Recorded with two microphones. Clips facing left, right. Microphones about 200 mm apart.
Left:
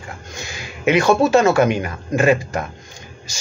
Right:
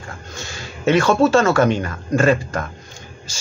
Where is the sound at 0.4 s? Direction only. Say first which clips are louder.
Even; 15° left (ahead or behind).